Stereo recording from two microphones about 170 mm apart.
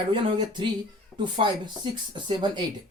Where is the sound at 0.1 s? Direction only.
30° right (ahead or behind).